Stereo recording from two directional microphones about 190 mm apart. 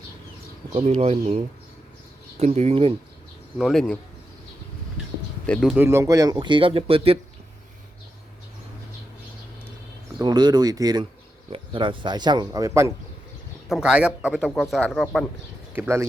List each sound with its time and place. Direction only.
0.7 s speech: 35° right (ahead or behind)
2.4 s speech: 35° right (ahead or behind)
3.6 s a man's voice: centre (ahead or behind)
5.5 s speech: centre (ahead or behind); by 7.2 s 30° right (ahead or behind)
10.2 s speech: 20° right (ahead or behind)
13.7 s a man's voice: centre (ahead or behind)
15.7 s speech: 10° right (ahead or behind)